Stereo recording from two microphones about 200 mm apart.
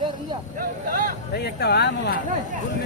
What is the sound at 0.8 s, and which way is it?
Speech, 45° right (ahead or behind).